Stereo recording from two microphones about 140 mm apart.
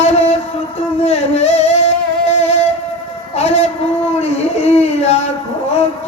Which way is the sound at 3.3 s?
50° left (ahead or behind).